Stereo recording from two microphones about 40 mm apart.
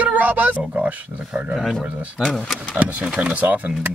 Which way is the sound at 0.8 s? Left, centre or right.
Right.